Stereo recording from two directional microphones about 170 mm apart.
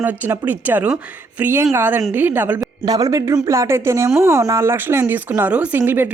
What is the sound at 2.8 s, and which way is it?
Speech, 25° right (ahead or behind).